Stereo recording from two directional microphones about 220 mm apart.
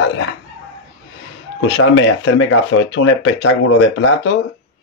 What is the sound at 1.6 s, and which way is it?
Speech, 60° left (ahead or behind).